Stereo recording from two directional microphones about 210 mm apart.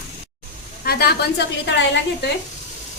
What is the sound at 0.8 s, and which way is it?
A woman's voice, 50° left (ahead or behind).